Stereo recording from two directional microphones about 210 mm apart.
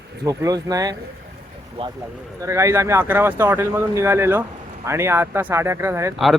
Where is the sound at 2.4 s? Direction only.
15° right (ahead or behind).